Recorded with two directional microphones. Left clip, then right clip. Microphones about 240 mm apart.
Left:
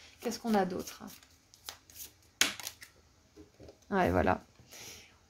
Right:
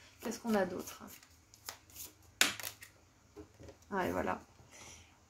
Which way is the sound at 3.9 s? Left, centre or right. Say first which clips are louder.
Left 7 dB; left.